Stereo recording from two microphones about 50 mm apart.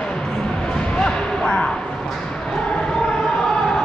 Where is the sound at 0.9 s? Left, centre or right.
Centre.